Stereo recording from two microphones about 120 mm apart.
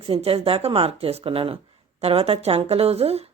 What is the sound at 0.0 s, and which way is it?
A woman's voice, 50° right (ahead or behind).